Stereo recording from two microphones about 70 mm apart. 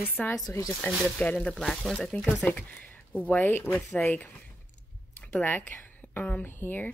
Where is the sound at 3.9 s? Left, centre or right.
Centre.